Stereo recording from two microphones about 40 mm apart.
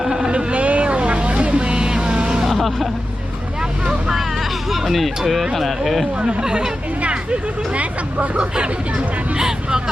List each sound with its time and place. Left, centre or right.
0.0 s a sound: centre
0.3 s vehicle: right
2.5 s vehicle: centre
4.7 s speech: centre
6.2 s speech: centre
7.0 s speech: right
8.4 s speech: right